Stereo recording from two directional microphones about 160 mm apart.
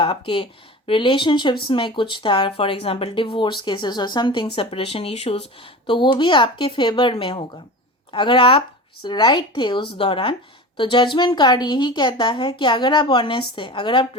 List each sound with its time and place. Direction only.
0.0 s a woman's voice: 30° left (ahead or behind)